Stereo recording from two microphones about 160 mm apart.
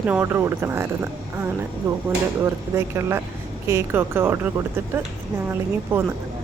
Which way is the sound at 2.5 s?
15° right (ahead or behind).